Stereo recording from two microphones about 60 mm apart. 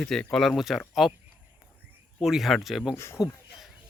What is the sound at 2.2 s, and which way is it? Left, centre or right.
Speech, centre.